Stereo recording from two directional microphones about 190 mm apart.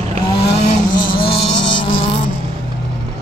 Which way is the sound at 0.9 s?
25° left (ahead or behind).